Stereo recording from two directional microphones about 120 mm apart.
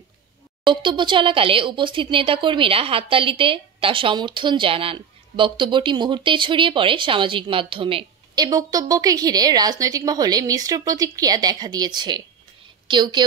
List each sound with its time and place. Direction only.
0.7 s speech: 40° right (ahead or behind)
8.4 s a woman's voice: 30° right (ahead or behind)